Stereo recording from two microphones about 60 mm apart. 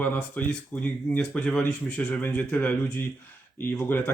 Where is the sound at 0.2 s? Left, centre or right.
Left.